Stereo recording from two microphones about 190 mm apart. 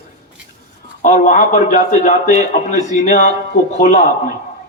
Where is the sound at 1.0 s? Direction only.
40° left (ahead or behind).